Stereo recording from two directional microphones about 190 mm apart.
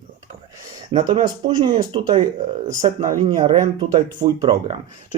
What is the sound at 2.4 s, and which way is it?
Speech, 45° right (ahead or behind).